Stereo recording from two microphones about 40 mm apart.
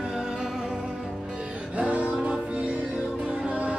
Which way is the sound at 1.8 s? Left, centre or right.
Right.